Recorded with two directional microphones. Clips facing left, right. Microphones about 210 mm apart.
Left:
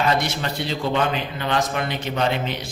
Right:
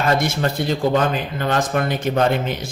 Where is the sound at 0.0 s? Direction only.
50° right (ahead or behind).